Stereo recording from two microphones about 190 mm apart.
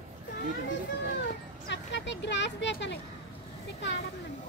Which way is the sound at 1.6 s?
70° left (ahead or behind).